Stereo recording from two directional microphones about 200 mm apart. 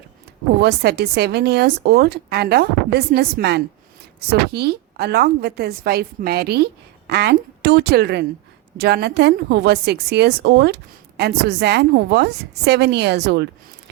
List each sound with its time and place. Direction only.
0.6 s a woman's voice: 55° right (ahead or behind)